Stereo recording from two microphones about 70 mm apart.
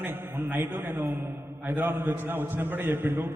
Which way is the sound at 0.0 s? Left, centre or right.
Right.